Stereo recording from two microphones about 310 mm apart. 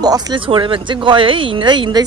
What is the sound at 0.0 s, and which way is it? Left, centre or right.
Speech, centre.